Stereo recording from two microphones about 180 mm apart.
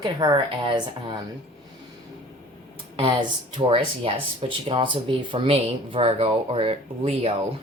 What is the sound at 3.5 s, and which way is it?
Speech, 30° right (ahead or behind).